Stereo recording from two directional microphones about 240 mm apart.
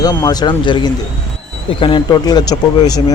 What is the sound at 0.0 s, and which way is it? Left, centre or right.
Speech, centre.